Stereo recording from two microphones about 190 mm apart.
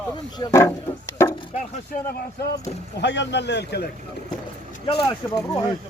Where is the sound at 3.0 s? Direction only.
65° left (ahead or behind).